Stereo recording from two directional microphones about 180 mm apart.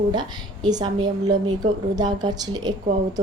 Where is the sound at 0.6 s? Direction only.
25° right (ahead or behind).